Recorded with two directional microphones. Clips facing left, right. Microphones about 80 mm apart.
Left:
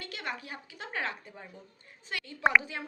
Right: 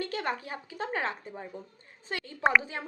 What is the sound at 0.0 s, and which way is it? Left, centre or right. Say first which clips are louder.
Speech: right 7 dB; right.